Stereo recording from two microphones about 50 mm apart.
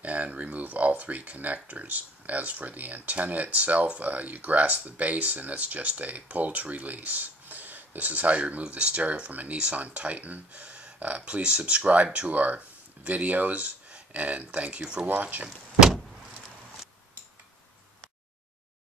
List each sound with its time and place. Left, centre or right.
0.0 s speech: right
15.0 s speech: right